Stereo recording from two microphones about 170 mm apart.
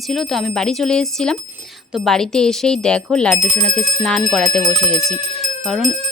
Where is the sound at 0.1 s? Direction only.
Centre (ahead or behind).